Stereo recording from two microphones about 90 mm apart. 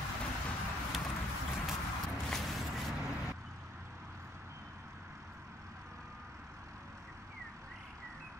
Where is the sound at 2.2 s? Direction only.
Centre (ahead or behind).